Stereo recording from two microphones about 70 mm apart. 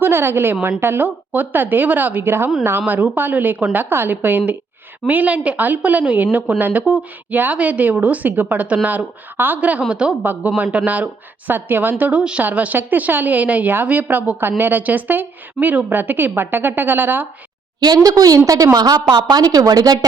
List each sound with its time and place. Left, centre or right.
0.0 s a woman's voice: right
17.7 s speech: right